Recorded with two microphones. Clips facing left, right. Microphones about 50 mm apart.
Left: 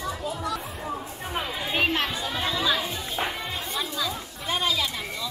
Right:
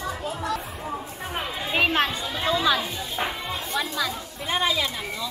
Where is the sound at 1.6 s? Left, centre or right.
Right.